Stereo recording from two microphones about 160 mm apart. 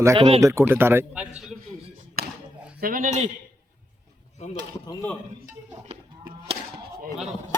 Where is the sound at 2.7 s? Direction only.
65° right (ahead or behind).